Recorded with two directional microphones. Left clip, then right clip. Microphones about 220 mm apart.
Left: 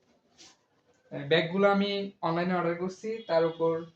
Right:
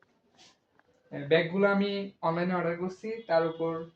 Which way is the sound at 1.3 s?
5° left (ahead or behind).